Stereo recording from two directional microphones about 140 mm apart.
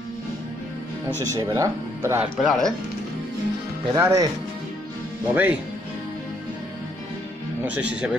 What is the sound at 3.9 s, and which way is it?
Speech, 20° right (ahead or behind).